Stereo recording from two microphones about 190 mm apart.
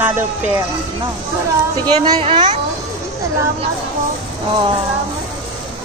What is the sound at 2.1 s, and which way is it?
Speech, 25° right (ahead or behind).